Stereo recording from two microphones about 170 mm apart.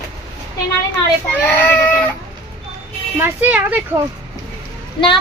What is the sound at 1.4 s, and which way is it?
Baby cry, 10° left (ahead or behind).